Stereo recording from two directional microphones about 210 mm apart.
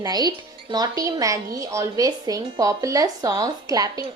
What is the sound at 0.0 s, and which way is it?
A woman's voice, 20° right (ahead or behind).